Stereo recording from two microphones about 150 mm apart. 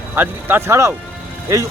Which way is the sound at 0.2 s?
15° right (ahead or behind).